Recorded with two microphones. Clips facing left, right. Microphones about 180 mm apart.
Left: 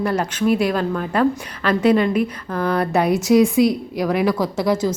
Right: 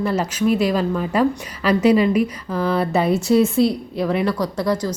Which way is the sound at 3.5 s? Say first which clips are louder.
Left 1 dB; 15° left (ahead or behind).